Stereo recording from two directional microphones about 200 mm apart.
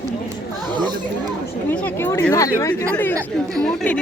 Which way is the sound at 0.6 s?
20° right (ahead or behind).